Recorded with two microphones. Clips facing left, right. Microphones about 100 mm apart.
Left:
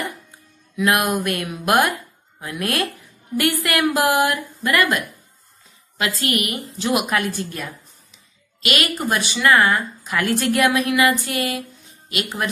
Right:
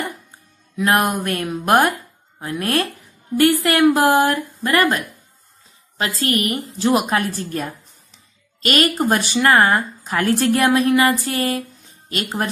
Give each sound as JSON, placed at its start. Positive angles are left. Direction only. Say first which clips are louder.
{"t": 0.7, "sound": "a woman's voice", "louder": "right 1 dB", "side_deg": -30}